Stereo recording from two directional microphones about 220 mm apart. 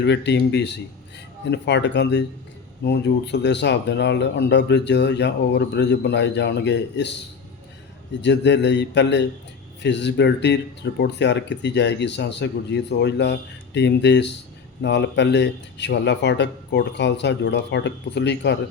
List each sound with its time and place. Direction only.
0.0 s speech: 50° left (ahead or behind)
8.2 s speech: 50° left (ahead or behind)